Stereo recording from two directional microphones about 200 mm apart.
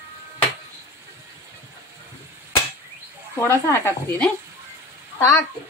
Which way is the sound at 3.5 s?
10° left (ahead or behind).